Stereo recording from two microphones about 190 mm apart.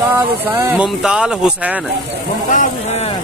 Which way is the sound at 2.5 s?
40° left (ahead or behind).